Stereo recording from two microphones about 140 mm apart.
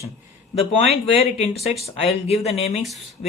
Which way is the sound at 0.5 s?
45° left (ahead or behind).